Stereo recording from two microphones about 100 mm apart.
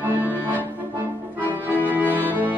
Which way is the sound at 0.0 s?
20° right (ahead or behind).